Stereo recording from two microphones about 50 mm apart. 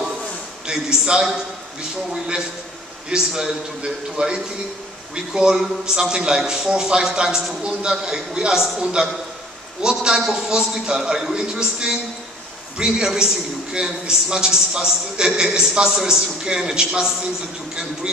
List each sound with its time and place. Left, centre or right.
0.7 s a man's voice: centre
3.1 s a man's voice: centre